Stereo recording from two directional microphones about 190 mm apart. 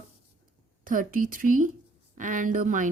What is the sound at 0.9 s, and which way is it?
Speech, 45° right (ahead or behind).